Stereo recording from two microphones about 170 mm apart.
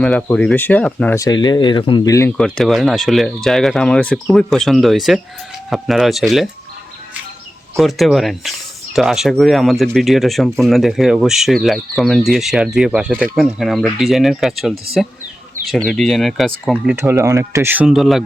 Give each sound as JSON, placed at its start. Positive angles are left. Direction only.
{"t": 0.0, "sound": "speech", "side_deg": 5}
{"t": 1.1, "sound": "speech", "side_deg": 20}
{"t": 2.4, "sound": "speech", "side_deg": 0}
{"t": 7.8, "sound": "speech", "side_deg": 0}
{"t": 16.7, "sound": "speech", "side_deg": -10}